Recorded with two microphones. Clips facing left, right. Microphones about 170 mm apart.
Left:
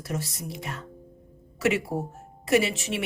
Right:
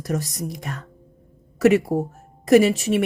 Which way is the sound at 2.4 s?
40° right (ahead or behind).